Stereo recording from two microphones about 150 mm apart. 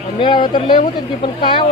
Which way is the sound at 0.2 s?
30° left (ahead or behind).